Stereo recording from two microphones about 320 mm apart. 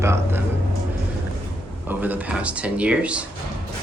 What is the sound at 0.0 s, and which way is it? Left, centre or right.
Speech, centre.